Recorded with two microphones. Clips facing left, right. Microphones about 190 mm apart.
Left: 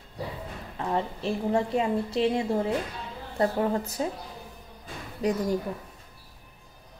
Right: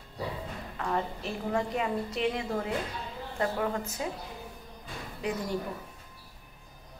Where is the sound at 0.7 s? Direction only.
25° left (ahead or behind).